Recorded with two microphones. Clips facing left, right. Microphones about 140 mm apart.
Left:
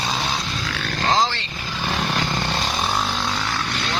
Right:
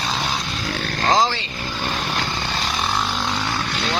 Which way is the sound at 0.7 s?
40° right (ahead or behind).